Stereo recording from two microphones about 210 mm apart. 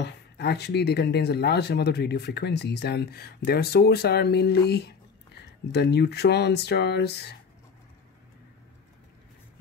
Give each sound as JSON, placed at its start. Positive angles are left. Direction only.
{"t": 0.0, "sound": "speech", "side_deg": 50}